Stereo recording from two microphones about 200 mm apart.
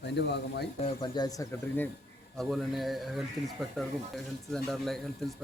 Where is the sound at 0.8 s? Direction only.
25° left (ahead or behind).